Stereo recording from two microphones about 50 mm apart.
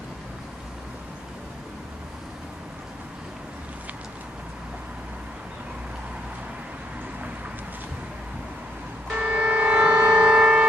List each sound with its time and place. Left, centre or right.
9.1 s music: right